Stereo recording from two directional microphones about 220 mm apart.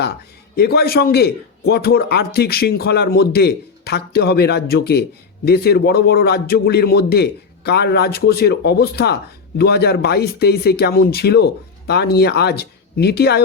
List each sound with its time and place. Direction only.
0.5 s speech: 45° left (ahead or behind)